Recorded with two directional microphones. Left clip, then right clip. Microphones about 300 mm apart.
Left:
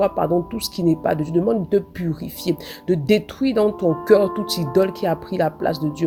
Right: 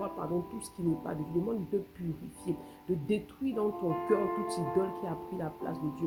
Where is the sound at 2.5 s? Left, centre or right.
Centre.